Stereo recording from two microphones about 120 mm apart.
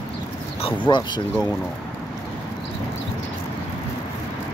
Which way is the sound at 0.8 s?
40° left (ahead or behind).